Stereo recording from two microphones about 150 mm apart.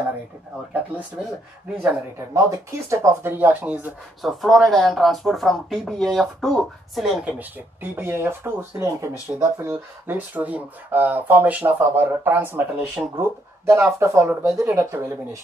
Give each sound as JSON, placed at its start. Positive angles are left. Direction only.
{"t": 1.8, "sound": "speech", "side_deg": -15}
{"t": 4.3, "sound": "speech", "side_deg": 0}